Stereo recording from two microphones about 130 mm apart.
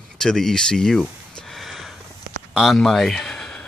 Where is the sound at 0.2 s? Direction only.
5° left (ahead or behind).